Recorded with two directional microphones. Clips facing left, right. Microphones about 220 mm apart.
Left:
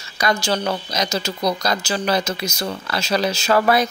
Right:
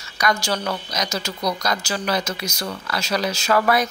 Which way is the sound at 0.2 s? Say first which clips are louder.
Left 2 dB; 25° left (ahead or behind).